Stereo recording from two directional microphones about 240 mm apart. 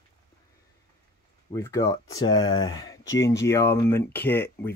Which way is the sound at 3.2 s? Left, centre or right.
Centre.